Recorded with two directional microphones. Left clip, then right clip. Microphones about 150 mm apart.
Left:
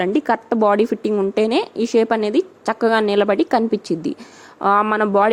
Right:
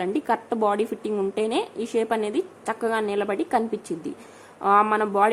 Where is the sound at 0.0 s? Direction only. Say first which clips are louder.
Left 6 dB; 35° left (ahead or behind).